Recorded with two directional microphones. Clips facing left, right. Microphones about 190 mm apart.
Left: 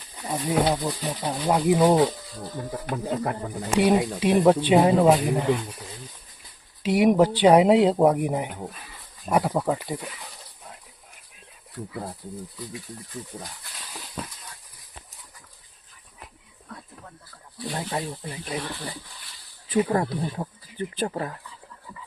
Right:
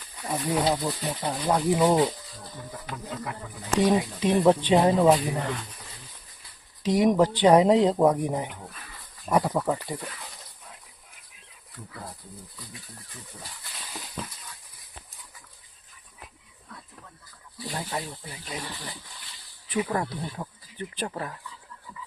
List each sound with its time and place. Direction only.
0.3 s speech: 10° left (ahead or behind)
0.7 s speech: centre (ahead or behind)
1.3 s speech: 15° left (ahead or behind)
2.8 s speech: 55° left (ahead or behind)
3.7 s speech: 10° left (ahead or behind)
6.8 s speech: 10° left (ahead or behind)
13.7 s a sound: centre (ahead or behind)
17.7 s speech: 35° left (ahead or behind)
19.7 s speech: 40° left (ahead or behind)
20.0 s speech: 25° left (ahead or behind)